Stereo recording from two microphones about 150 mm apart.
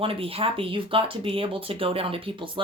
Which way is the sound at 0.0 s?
40° right (ahead or behind).